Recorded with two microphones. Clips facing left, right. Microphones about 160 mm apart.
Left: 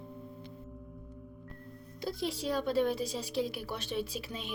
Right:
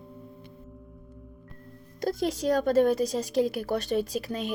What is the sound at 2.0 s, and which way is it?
A woman's voice, 45° right (ahead or behind).